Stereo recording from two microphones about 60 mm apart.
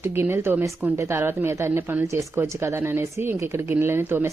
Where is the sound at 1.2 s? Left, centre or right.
Right.